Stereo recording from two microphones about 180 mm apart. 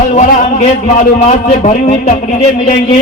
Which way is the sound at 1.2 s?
45° left (ahead or behind).